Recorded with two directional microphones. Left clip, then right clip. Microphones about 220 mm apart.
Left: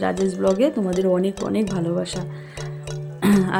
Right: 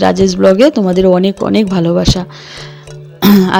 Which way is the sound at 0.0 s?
40° right (ahead or behind).